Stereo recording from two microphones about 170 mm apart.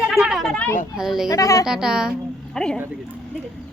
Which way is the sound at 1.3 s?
20° left (ahead or behind).